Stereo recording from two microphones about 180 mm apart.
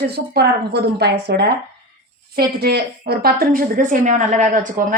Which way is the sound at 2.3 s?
60° right (ahead or behind).